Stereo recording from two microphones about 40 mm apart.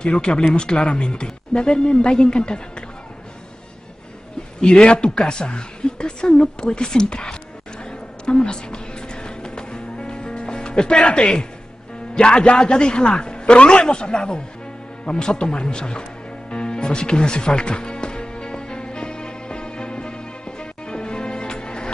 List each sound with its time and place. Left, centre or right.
0.0 s a woman's voice: left
4.7 s a woman's voice: left
7.8 s music: left
11.0 s a woman's voice: left
15.0 s music: left